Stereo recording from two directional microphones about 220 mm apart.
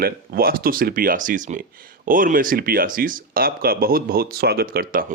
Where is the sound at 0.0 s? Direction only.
45° right (ahead or behind).